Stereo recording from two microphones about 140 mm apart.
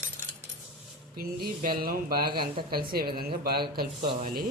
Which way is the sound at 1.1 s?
90° right.